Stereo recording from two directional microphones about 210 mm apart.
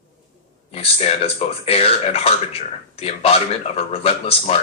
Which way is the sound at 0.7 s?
30° left (ahead or behind).